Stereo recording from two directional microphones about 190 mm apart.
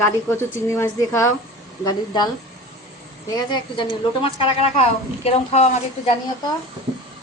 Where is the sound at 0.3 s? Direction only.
15° left (ahead or behind); by 5.7 s 35° left (ahead or behind).